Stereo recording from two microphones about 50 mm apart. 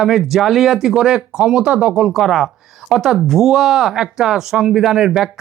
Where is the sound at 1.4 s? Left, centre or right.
Right.